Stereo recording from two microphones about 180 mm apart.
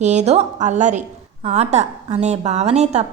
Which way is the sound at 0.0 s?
40° right (ahead or behind).